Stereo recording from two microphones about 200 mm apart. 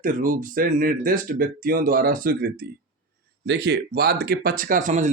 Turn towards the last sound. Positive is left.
turn(degrees=-40)  # may be behind; listen again after turning